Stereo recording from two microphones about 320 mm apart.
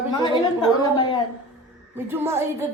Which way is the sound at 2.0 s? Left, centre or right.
Centre.